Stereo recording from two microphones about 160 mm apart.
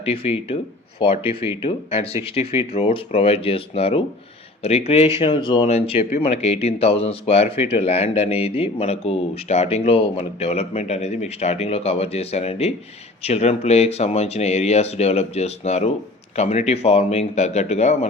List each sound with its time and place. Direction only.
0.0 s speech: 35° left (ahead or behind)
5.2 s speech: 30° left (ahead or behind)